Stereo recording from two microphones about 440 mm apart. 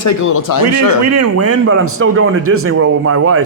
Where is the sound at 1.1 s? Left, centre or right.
Right.